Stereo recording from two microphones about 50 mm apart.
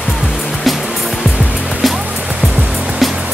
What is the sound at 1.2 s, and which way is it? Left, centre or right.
Music, left.